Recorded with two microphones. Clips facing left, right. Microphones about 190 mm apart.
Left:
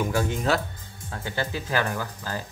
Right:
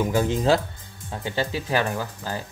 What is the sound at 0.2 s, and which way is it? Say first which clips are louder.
Speech: right 4 dB; 25° right (ahead or behind).